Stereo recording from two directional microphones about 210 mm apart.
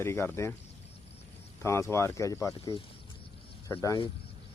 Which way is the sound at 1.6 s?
15° left (ahead or behind).